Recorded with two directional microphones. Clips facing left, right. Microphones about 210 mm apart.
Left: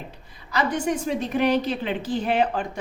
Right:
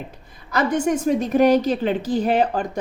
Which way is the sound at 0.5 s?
45° right (ahead or behind).